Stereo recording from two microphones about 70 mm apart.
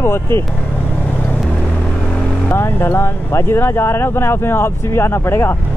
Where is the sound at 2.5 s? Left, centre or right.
Left.